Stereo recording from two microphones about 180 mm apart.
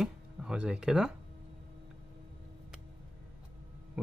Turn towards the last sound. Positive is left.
turn(degrees=0)  # may be behind; listen again after turning